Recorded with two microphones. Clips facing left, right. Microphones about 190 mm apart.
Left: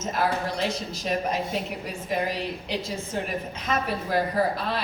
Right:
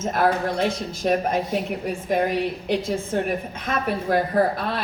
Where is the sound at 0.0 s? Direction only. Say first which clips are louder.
Right 5 dB; 50° right (ahead or behind).